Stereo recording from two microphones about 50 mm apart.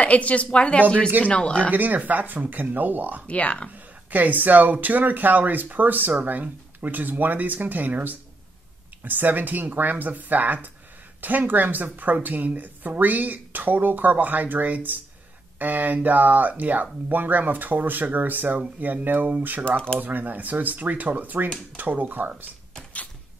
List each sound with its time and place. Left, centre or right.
0.0 s a woman's voice: left
1.7 s speech: right
3.3 s a woman's voice: left
3.7 s speech: right